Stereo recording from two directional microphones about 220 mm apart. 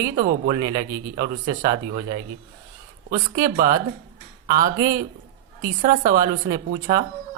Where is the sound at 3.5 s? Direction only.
40° right (ahead or behind).